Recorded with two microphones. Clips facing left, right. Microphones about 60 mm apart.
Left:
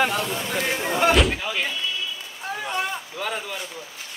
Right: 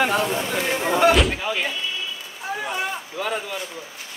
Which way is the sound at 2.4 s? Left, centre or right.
Centre.